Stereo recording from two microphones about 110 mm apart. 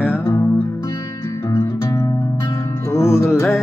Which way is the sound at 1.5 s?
25° left (ahead or behind).